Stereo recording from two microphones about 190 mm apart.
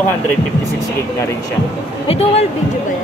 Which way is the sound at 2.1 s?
30° left (ahead or behind).